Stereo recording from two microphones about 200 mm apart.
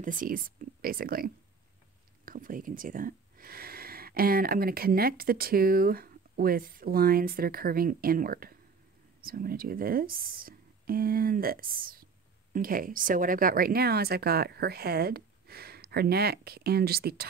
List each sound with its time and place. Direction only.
0.0 s speech: 40° right (ahead or behind)